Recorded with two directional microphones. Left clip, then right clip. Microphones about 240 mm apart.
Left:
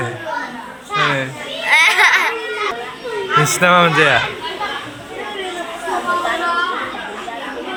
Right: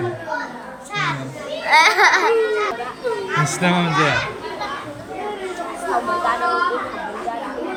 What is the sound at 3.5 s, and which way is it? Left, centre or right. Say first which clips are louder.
Speech: left 11 dB; centre.